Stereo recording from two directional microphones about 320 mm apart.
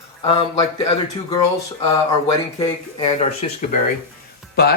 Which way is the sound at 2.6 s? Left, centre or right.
Centre.